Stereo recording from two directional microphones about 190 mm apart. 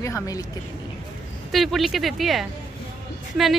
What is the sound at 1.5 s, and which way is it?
Speech, centre (ahead or behind).